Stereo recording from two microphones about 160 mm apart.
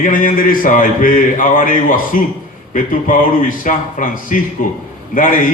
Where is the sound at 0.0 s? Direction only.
60° left (ahead or behind).